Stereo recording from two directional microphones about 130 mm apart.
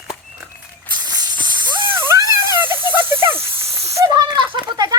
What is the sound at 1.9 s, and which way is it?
Music, 20° right (ahead or behind).